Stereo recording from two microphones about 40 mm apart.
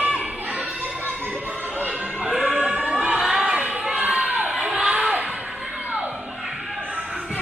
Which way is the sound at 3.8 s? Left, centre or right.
Right.